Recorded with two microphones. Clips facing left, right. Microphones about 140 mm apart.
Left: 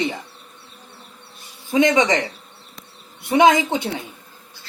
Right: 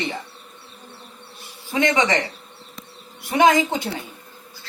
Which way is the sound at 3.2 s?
20° left (ahead or behind).